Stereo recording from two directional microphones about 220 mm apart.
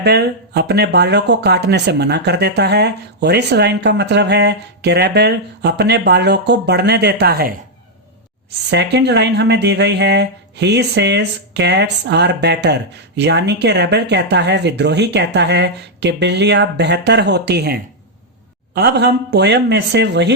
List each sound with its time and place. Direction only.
0.0 s speech: 50° right (ahead or behind)
8.7 s speech: 50° right (ahead or behind)